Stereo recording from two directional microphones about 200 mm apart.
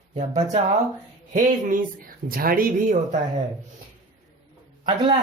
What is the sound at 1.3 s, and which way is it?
Speech, 40° right (ahead or behind).